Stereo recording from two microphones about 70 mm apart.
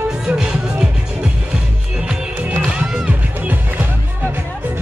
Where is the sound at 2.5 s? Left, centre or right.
Right.